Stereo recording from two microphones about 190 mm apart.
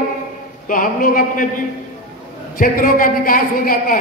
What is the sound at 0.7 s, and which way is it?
Speech, 50° left (ahead or behind).